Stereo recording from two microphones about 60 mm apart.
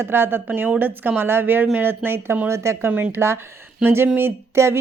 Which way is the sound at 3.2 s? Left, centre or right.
Right.